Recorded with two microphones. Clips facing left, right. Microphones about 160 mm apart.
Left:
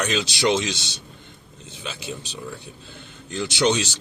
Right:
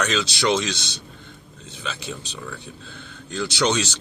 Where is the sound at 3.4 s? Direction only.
20° left (ahead or behind).